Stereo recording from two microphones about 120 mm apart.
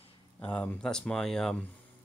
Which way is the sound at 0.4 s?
15° left (ahead or behind).